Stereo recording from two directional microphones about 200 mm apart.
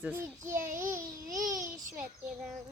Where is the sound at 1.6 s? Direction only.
40° right (ahead or behind).